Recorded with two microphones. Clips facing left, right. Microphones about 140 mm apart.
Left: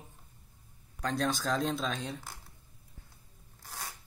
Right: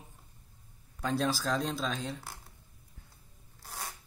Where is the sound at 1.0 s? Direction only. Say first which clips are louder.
Right 1 dB; 5° right (ahead or behind).